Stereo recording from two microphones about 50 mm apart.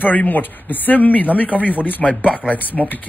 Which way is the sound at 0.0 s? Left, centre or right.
Left.